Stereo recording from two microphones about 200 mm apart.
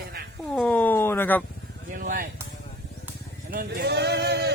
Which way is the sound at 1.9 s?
40° right (ahead or behind).